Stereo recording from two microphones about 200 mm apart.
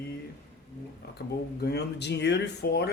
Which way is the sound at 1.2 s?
55° left (ahead or behind).